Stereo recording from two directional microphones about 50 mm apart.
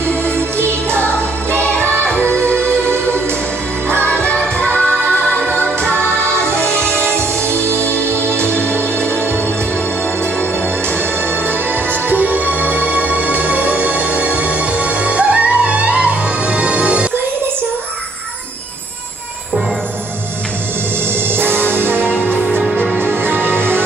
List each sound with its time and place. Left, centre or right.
0.6 s music: right
0.9 s music: left
4.0 s music: left
7.2 s music: right
11.4 s music: right
21.3 s music: right